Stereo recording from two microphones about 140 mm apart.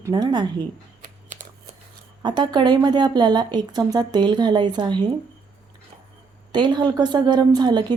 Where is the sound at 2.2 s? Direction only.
30° right (ahead or behind).